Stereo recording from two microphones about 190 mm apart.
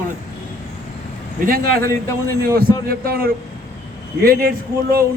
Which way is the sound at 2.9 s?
50° right (ahead or behind).